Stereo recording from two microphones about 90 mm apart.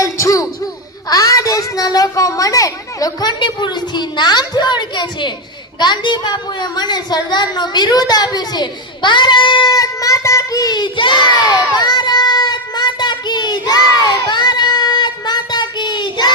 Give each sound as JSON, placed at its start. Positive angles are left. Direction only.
{"t": 0.0, "sound": "a woman's voice", "side_deg": 40}
{"t": 9.7, "sound": "a child's voice", "side_deg": 40}